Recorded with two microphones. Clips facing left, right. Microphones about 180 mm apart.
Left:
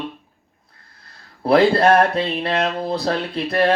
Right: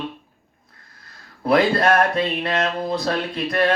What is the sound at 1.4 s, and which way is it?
Speech, 30° left (ahead or behind).